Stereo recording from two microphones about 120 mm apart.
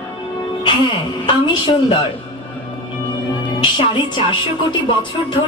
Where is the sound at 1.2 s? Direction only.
40° left (ahead or behind).